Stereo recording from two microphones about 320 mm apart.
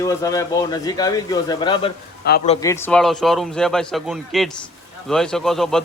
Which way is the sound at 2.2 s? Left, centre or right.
Left.